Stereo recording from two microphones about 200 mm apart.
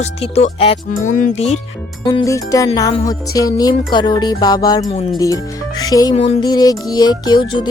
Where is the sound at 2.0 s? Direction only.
20° left (ahead or behind).